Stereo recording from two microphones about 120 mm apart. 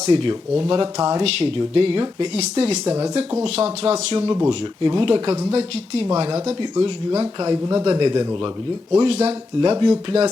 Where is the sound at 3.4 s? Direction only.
50° right (ahead or behind).